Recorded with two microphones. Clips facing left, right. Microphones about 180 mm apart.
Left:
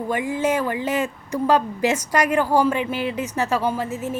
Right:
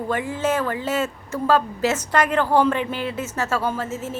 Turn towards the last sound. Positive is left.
turn(degrees=15)  # may be behind; listen again after turning